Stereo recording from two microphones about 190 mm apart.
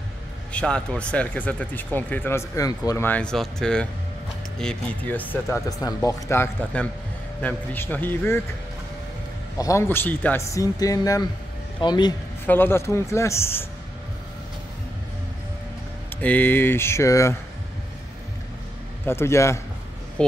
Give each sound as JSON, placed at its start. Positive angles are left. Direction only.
{"t": 0.5, "sound": "speech", "side_deg": 5}
{"t": 9.6, "sound": "speech", "side_deg": 15}
{"t": 12.4, "sound": "speech", "side_deg": 10}
{"t": 16.2, "sound": "speech", "side_deg": 10}
{"t": 19.0, "sound": "speech", "side_deg": 15}
{"t": 20.2, "sound": "speech", "side_deg": 5}